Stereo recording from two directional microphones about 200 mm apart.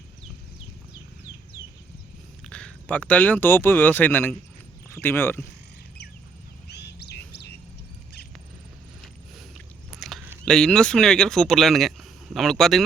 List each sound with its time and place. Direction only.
2.4 s speech: 5° left (ahead or behind)
6.7 s chirp: 55° left (ahead or behind)
10.4 s speech: 5° left (ahead or behind)